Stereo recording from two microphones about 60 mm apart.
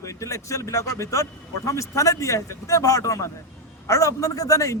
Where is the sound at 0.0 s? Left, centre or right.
Left.